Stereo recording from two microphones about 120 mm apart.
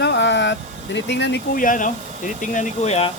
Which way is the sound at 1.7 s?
90° left.